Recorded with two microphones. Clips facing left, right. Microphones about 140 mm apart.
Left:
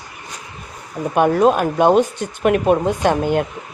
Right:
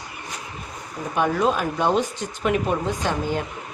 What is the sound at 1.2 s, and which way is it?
Speech, 55° left (ahead or behind).